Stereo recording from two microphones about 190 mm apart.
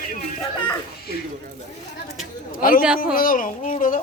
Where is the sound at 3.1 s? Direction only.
50° left (ahead or behind).